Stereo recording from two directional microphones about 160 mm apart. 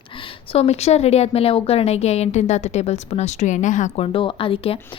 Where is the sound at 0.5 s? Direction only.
40° left (ahead or behind).